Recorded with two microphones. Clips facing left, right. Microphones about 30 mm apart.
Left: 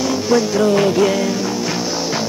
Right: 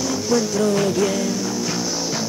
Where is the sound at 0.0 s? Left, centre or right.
Left.